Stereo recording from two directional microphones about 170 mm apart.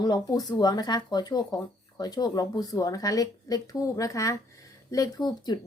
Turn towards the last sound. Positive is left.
turn(degrees=25)  # may be behind; listen again after turning